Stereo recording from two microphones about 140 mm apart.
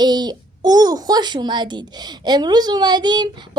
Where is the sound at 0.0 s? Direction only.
30° right (ahead or behind).